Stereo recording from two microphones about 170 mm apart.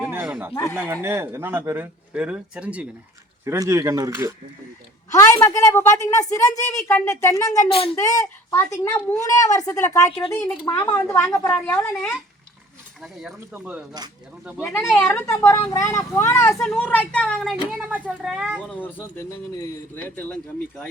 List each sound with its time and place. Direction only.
0.0 s a sound: 10° right (ahead or behind)
0.5 s speech: 20° left (ahead or behind)
1.0 s speech: 15° right (ahead or behind)
5.1 s speech: 15° left (ahead or behind)
7.7 s speech: 35° left (ahead or behind)
7.9 s speech: 20° left (ahead or behind)
13.0 s speech: 5° right (ahead or behind)
14.6 s speech: 15° left (ahead or behind); by 18.6 s 5° right (ahead or behind)
18.7 s speech: 10° left (ahead or behind)